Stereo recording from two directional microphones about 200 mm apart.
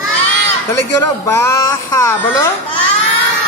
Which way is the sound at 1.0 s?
15° left (ahead or behind).